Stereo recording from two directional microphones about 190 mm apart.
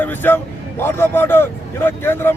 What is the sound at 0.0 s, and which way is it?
A man's voice, 10° left (ahead or behind).